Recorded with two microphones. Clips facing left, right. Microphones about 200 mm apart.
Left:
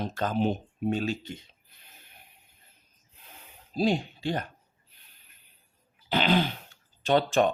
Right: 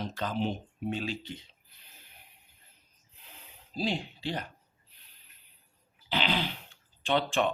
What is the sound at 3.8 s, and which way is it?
Speech, 45° left (ahead or behind).